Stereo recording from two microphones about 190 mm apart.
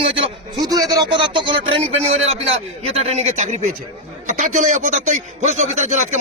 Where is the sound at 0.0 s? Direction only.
30° right (ahead or behind).